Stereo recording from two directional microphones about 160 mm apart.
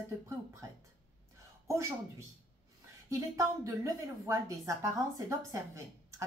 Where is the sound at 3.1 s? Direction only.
20° right (ahead or behind).